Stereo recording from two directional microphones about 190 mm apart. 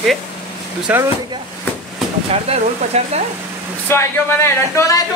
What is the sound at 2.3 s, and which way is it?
Speech, 35° right (ahead or behind).